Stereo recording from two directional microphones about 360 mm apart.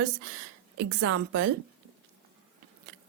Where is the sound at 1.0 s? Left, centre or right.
Right.